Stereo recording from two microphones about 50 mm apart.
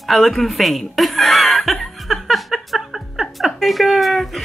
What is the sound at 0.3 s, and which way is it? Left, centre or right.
Speech, centre.